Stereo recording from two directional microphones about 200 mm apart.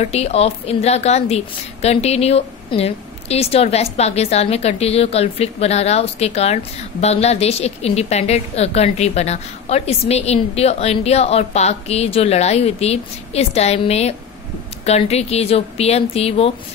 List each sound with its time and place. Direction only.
0.0 s a woman's voice: 30° left (ahead or behind)